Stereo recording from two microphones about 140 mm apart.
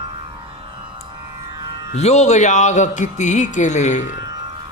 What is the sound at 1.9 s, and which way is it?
A man's voice, 50° left (ahead or behind).